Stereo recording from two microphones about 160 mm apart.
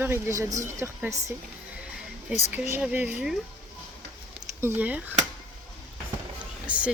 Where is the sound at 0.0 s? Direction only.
15° right (ahead or behind).